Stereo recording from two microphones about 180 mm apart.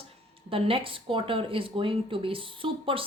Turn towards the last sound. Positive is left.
turn(degrees=-30)  # may be behind; listen again after turning